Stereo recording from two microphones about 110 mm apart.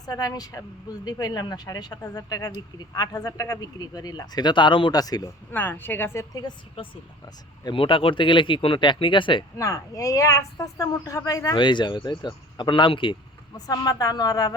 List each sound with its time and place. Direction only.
0.0 s speech: 35° left (ahead or behind)
4.9 s speech: 35° left (ahead or behind)
5.5 s a woman's voice: 15° left (ahead or behind)
6.8 s speech: 55° left (ahead or behind)
9.6 s speech: 30° left (ahead or behind)
11.5 s speech: 45° left (ahead or behind)
13.5 s speech: 35° left (ahead or behind)